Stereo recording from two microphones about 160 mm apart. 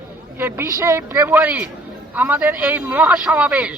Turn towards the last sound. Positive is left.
turn(degrees=-10)  # may be behind; listen again after turning